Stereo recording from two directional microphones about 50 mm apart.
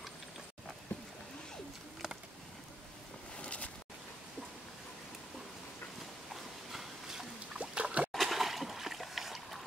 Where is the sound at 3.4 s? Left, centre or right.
Left.